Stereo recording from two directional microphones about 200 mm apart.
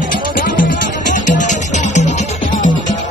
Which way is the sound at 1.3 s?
35° left (ahead or behind).